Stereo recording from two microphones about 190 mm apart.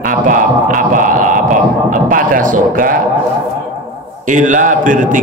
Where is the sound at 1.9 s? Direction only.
45° right (ahead or behind).